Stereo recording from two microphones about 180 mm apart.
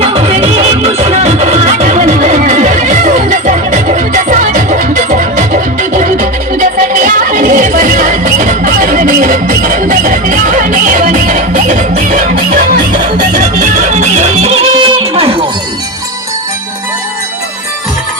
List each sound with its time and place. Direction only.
0.0 s music: 30° right (ahead or behind)